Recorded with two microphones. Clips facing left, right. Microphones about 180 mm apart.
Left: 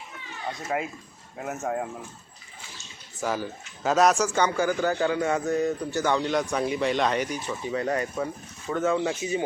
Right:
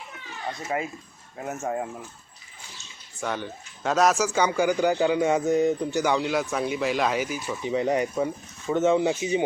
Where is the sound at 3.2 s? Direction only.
Centre (ahead or behind).